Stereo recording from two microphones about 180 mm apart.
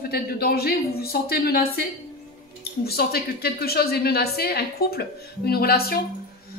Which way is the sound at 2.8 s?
60° left (ahead or behind).